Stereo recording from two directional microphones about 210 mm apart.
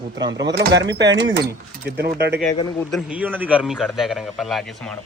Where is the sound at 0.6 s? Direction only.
55° right (ahead or behind).